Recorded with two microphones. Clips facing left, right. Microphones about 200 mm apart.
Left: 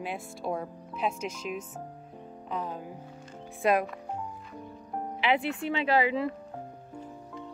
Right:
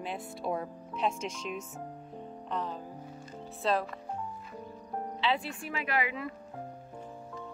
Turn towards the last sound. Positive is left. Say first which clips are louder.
# left 7 dB
turn(degrees=30)  # may be behind; listen again after turning